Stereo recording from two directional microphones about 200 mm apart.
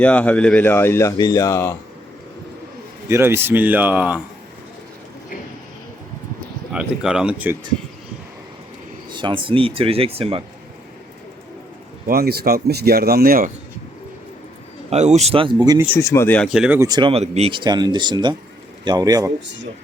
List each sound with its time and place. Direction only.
0.0 s speech: 5° left (ahead or behind)
3.1 s speech: 10° right (ahead or behind)
6.7 s speech: 5° right (ahead or behind)
9.0 s speech: 25° right (ahead or behind)
12.0 s speech: 50° right (ahead or behind)
14.8 s speech: 35° right (ahead or behind)
16.0 s speech: 15° left (ahead or behind); by 19.3 s 15° right (ahead or behind)